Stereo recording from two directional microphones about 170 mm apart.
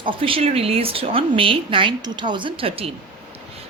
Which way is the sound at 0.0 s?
30° right (ahead or behind).